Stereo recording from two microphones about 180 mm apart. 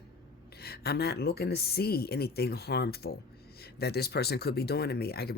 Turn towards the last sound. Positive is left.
turn(degrees=60)  # may be behind; listen again after turning